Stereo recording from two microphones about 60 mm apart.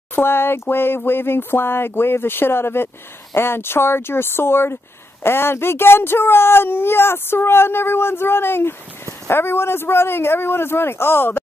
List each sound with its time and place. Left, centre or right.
0.1 s speech: left